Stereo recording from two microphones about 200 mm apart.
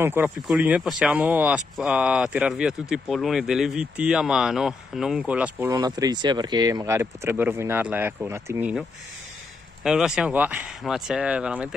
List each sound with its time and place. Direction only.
0.0 s speech: 10° right (ahead or behind)
5.7 s speech: 20° right (ahead or behind)
9.8 s speech: centre (ahead or behind)